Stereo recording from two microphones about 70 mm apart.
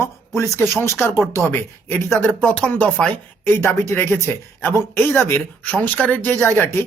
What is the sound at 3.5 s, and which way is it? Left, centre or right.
Speech, left.